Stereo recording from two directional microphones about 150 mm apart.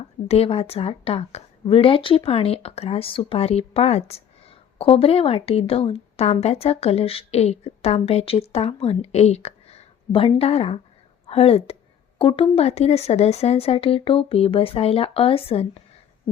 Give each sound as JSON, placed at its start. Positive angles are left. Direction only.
{"t": 0.3, "sound": "speech", "side_deg": 40}